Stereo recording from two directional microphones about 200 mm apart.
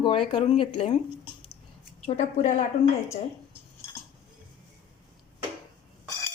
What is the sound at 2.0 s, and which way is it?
Speech, 35° left (ahead or behind).